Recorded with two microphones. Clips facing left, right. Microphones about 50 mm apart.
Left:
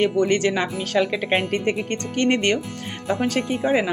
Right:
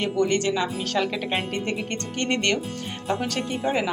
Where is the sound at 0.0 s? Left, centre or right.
Left.